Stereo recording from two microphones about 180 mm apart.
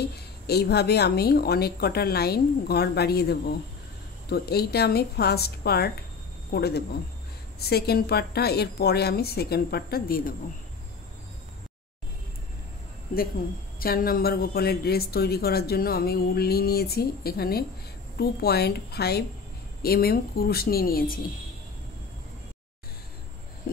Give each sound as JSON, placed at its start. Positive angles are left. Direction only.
{"t": 0.5, "sound": "speech", "side_deg": 65}
{"t": 13.7, "sound": "speech", "side_deg": 55}